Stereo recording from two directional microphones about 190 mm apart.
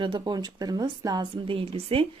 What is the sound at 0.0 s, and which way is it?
Speech, 25° right (ahead or behind).